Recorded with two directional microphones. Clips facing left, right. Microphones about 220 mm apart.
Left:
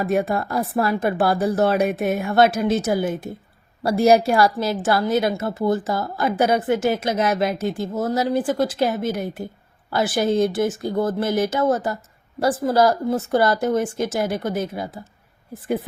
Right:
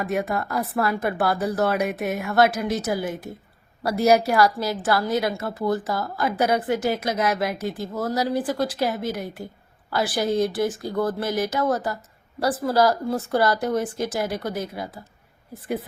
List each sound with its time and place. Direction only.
0.0 s a woman's voice: 30° left (ahead or behind)